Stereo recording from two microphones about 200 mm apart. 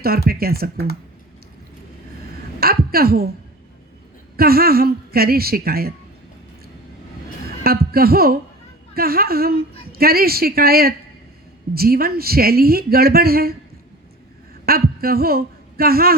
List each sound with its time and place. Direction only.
0.0 s a woman's voice: 50° right (ahead or behind)
2.6 s a woman's voice: 50° right (ahead or behind)
4.4 s a woman's voice: 50° right (ahead or behind)
7.6 s a woman's voice: 50° right (ahead or behind)
14.7 s speech: 50° right (ahead or behind)